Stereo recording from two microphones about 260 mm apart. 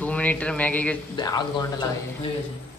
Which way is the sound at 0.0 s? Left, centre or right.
Centre.